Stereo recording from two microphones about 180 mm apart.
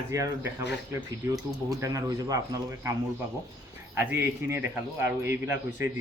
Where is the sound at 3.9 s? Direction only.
10° right (ahead or behind).